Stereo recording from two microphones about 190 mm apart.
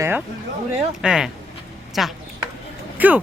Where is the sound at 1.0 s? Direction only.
5° right (ahead or behind).